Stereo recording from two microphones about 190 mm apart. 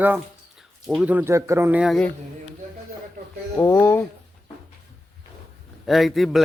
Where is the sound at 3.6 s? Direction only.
15° left (ahead or behind).